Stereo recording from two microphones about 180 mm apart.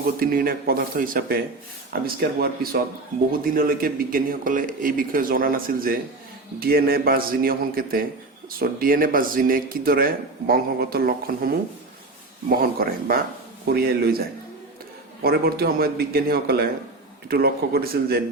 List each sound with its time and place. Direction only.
0.2 s a man's voice: 55° right (ahead or behind)